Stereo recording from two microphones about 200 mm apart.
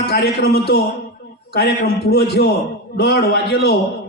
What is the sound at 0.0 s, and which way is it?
A man's voice, 55° left (ahead or behind).